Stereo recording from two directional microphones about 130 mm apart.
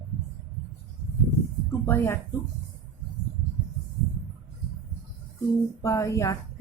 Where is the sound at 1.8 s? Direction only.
20° left (ahead or behind).